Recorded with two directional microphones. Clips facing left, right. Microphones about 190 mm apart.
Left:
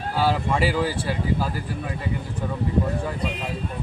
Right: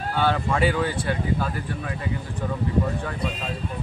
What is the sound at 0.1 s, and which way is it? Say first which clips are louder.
Speech: left 1 dB; 5° left (ahead or behind).